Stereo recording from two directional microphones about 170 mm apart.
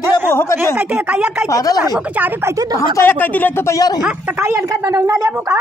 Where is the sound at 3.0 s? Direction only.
10° left (ahead or behind).